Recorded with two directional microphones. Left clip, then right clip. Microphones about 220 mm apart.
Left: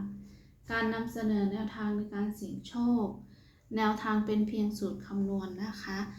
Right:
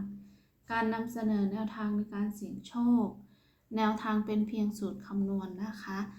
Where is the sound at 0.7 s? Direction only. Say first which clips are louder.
Even; 5° right (ahead or behind).